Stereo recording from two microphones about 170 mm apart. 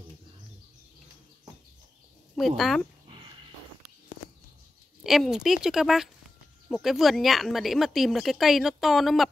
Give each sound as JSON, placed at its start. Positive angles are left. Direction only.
{"t": 2.3, "sound": "speech", "side_deg": 0}
{"t": 3.1, "sound": "a sound", "side_deg": -30}
{"t": 5.0, "sound": "speech", "side_deg": 0}